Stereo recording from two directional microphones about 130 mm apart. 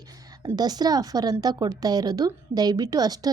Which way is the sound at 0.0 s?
30° right (ahead or behind).